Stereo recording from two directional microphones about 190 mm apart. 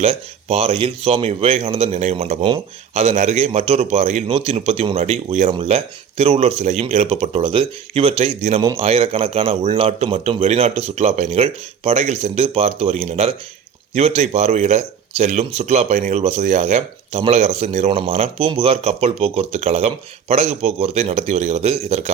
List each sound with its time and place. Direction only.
0.0 s speech: 30° right (ahead or behind)